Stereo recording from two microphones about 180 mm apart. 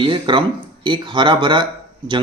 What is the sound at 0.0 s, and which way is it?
A man's voice, 25° right (ahead or behind).